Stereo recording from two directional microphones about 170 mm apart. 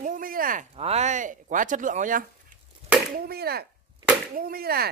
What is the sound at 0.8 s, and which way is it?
Speech, 40° right (ahead or behind).